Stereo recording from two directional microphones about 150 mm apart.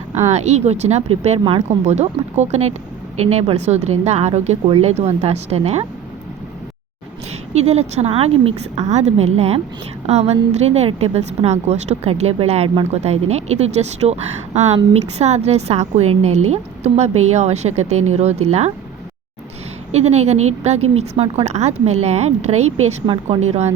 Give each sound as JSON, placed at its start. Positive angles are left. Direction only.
{"t": 0.3, "sound": "speech", "side_deg": -50}
{"t": 7.5, "sound": "speech", "side_deg": -45}
{"t": 19.9, "sound": "speech", "side_deg": -45}